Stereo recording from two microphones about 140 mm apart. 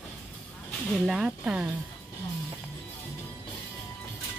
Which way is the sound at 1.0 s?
5° right (ahead or behind).